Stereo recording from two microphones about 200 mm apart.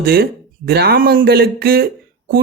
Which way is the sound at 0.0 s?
50° right (ahead or behind).